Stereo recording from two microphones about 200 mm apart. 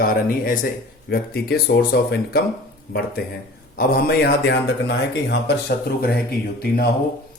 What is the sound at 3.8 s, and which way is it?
A man's voice, 50° left (ahead or behind).